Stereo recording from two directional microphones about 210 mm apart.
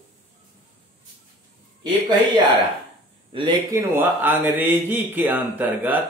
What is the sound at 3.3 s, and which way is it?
Speech, 25° right (ahead or behind).